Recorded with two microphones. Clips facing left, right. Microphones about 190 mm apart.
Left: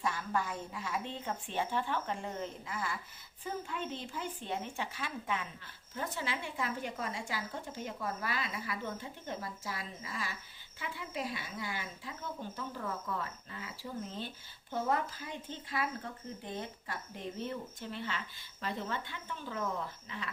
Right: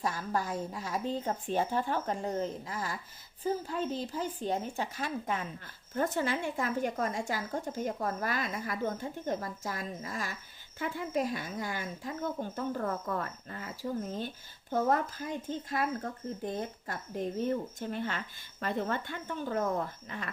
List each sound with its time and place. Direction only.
0.0 s speech: 40° right (ahead or behind)